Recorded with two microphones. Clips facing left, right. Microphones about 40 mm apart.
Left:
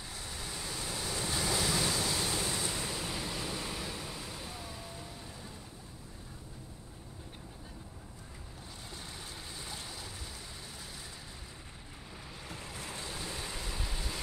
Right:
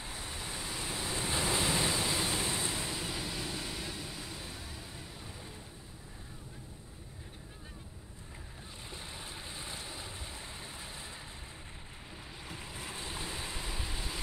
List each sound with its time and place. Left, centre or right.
0.0 s waves: right; by 4.6 s centre
9.6 s boat: right
12.4 s waves: centre